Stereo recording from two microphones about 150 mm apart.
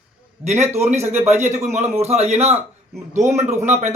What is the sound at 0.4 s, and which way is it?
Speech, 50° right (ahead or behind).